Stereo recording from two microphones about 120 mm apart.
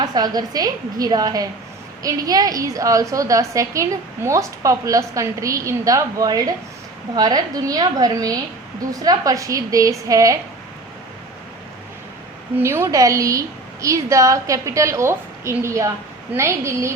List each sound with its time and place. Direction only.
0.0 s a woman's voice: 35° right (ahead or behind)
12.5 s a woman's voice: 20° right (ahead or behind)